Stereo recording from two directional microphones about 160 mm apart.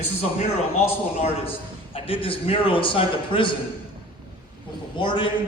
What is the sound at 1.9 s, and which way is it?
A man's voice, 35° left (ahead or behind).